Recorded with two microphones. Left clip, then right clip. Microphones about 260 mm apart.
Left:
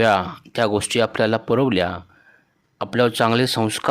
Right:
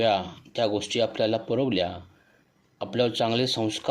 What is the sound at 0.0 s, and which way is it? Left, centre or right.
Speech, left.